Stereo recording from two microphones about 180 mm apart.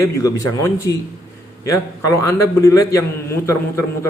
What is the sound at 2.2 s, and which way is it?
Speech, 15° left (ahead or behind).